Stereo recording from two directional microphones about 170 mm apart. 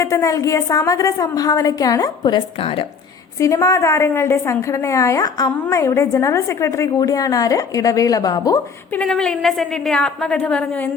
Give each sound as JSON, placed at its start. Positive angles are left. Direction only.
{"t": 0.0, "sound": "a woman's voice", "side_deg": 20}
{"t": 3.4, "sound": "a woman's voice", "side_deg": 20}
{"t": 9.0, "sound": "a woman's voice", "side_deg": 5}